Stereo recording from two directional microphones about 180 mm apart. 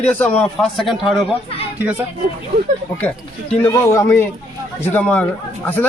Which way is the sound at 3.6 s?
15° left (ahead or behind).